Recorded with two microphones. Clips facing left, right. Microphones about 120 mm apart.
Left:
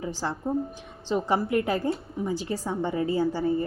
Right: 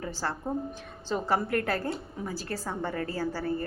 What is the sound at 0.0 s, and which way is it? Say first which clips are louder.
A woman's voice: left 3 dB; 15° left (ahead or behind).